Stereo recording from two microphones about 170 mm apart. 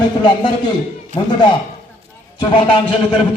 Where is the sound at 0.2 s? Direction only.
25° left (ahead or behind).